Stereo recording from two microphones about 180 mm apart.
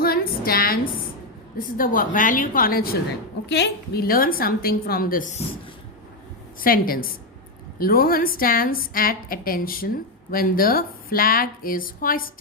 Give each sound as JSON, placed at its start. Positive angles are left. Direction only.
{"t": 0.0, "sound": "a sound", "side_deg": 55}
{"t": 1.5, "sound": "a woman's voice", "side_deg": 50}
{"t": 6.6, "sound": "a woman's voice", "side_deg": 50}